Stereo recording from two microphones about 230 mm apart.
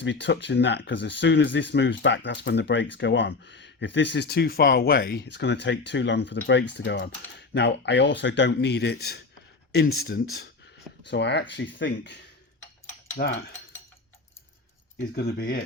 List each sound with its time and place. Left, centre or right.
0.0 s speech: left
13.2 s cutlery: left
15.1 s speech: left